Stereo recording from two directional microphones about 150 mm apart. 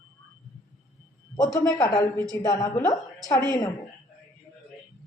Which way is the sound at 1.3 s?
25° left (ahead or behind).